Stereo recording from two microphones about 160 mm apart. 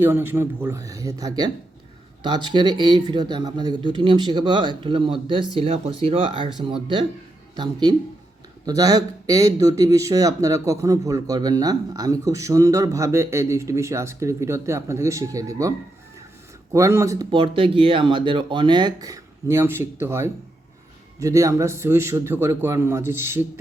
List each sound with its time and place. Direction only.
0.0 s speech: 15° right (ahead or behind)
16.7 s speech: 20° right (ahead or behind)
17.3 s a man's voice: 30° right (ahead or behind); by 23.5 s 15° right (ahead or behind)